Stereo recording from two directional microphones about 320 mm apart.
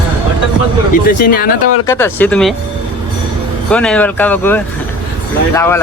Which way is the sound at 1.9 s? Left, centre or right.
Centre.